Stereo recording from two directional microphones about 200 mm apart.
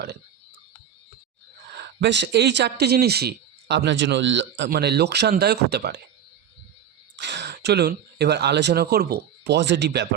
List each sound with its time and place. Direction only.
1.7 s speech: 55° right (ahead or behind)
7.2 s speech: 60° right (ahead or behind)